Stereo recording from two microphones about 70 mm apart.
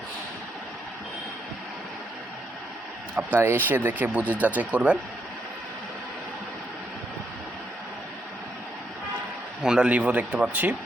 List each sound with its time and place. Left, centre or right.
3.2 s speech: right
9.6 s speech: centre